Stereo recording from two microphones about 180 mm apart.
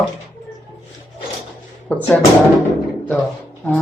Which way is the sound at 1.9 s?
5° left (ahead or behind).